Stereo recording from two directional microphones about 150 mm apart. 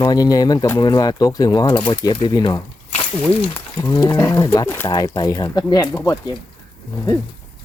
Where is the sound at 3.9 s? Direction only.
25° left (ahead or behind).